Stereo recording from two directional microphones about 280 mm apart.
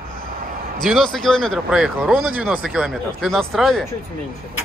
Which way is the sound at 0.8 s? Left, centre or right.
Centre.